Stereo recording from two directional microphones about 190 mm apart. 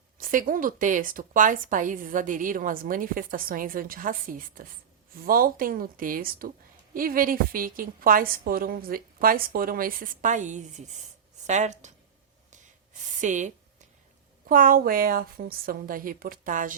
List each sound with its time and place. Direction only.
0.2 s speech: 45° right (ahead or behind)
12.5 s a sound: 40° right (ahead or behind)
14.4 s speech: 50° right (ahead or behind)